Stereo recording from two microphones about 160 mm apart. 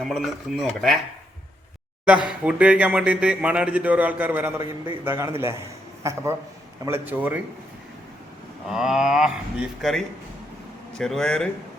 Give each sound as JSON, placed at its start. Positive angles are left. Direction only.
{"t": 0.0, "sound": "speech", "side_deg": 5}
{"t": 2.0, "sound": "speech", "side_deg": -5}
{"t": 8.7, "sound": "speech", "side_deg": -5}